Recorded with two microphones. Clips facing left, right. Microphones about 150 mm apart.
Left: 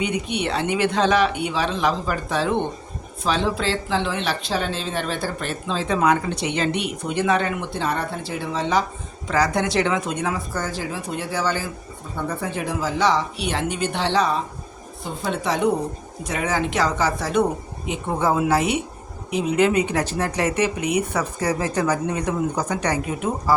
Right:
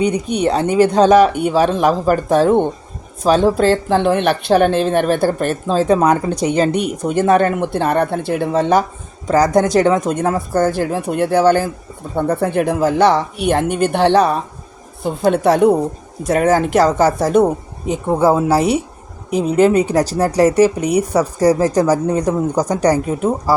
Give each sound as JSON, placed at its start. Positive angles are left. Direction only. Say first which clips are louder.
{"t": 0.0, "sound": "speech", "louder": "right 8 dB", "side_deg": -40}